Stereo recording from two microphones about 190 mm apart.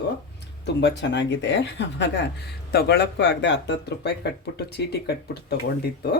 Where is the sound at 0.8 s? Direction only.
65° left (ahead or behind).